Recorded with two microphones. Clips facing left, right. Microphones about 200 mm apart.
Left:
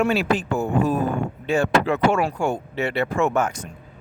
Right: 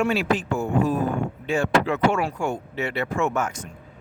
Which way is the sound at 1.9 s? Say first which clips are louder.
Left 2 dB; 35° left (ahead or behind).